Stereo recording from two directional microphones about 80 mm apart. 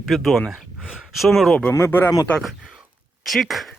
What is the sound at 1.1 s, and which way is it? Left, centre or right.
Speech, centre.